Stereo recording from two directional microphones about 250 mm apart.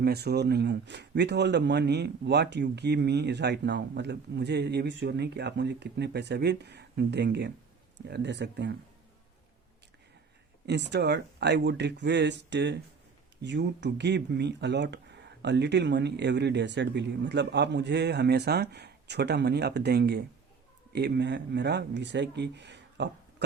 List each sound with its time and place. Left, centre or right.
0.0 s a man's voice: right
10.7 s a man's voice: right